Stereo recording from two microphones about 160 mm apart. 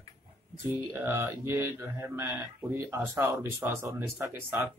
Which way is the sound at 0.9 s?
15° right (ahead or behind).